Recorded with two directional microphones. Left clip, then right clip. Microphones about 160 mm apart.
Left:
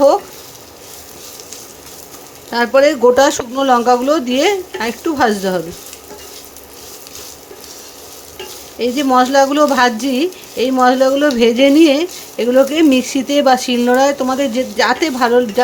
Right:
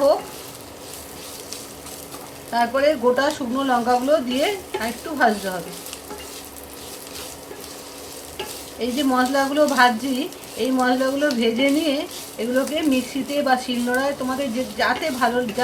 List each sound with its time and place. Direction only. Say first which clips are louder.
2.5 s speech: left 7 dB; 90° left
8.8 s speech: left 8 dB; 90° left